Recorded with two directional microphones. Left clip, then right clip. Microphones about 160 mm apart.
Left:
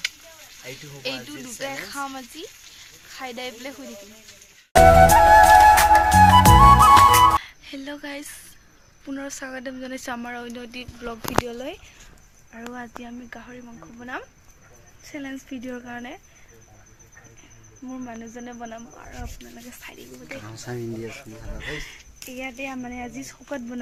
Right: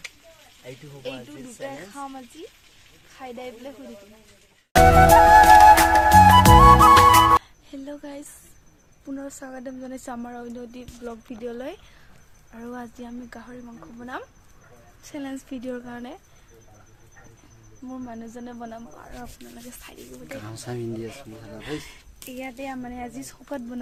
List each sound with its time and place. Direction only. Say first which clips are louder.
1.0 s speech: left 4 dB; 20° left (ahead or behind)
4.7 s music: left 1 dB; centre (ahead or behind)
9.0 s speech: left 3 dB; 10° left (ahead or behind)
18.1 s speech: left 1 dB; 10° left (ahead or behind)
19.5 s speech: left 3 dB; centre (ahead or behind); by 23.8 s 20° left (ahead or behind)